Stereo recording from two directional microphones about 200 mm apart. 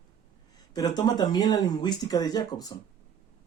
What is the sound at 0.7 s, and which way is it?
Speech, 20° left (ahead or behind).